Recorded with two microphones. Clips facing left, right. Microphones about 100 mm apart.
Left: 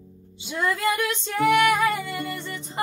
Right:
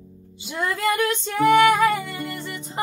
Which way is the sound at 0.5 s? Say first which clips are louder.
Even; centre (ahead or behind).